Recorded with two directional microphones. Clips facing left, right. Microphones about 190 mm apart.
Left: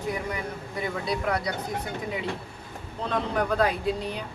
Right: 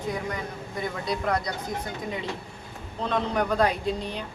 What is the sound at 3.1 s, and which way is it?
Speech, 5° left (ahead or behind).